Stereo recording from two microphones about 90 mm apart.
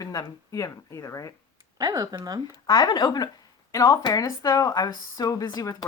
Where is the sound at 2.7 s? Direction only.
50° left (ahead or behind).